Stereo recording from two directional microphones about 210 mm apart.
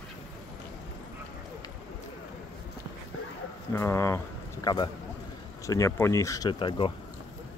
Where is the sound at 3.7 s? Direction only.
10° left (ahead or behind).